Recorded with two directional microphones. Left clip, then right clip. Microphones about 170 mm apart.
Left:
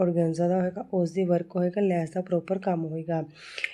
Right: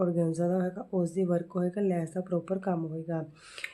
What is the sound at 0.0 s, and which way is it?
Speech, 5° left (ahead or behind).